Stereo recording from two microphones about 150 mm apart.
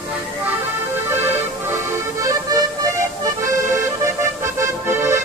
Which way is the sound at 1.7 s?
20° right (ahead or behind).